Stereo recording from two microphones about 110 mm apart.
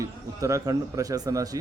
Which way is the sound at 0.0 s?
30° right (ahead or behind).